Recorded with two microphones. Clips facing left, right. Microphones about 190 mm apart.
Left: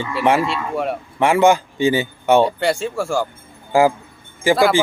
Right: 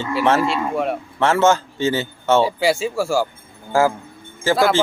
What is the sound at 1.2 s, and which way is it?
Speech, 15° left (ahead or behind).